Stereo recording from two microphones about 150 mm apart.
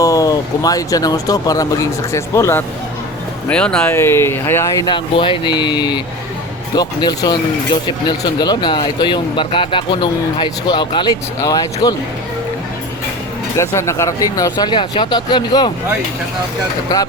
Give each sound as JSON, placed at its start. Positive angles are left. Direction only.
{"t": 0.0, "sound": "speech", "side_deg": 25}
{"t": 3.5, "sound": "speech", "side_deg": 5}
{"t": 13.6, "sound": "speech", "side_deg": 20}